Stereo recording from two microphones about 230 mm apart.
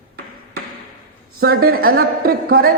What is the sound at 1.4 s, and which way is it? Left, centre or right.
A man's voice, right.